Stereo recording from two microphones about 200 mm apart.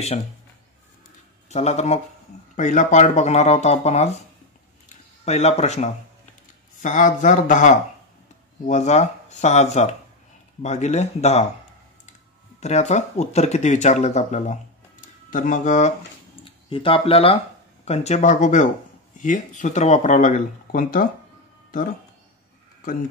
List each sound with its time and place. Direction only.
1.5 s speech: 35° left (ahead or behind)
4.8 s a sound: 35° left (ahead or behind)
6.8 s speech: 40° left (ahead or behind)
16.6 s speech: 25° left (ahead or behind); by 21.1 s 45° left (ahead or behind)